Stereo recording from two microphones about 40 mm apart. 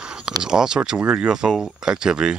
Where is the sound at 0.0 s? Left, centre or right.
Centre.